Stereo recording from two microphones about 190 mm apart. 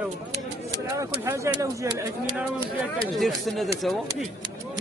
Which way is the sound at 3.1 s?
Centre (ahead or behind).